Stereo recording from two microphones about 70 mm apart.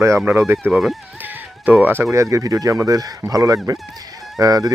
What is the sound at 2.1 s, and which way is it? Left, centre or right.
Speech, right.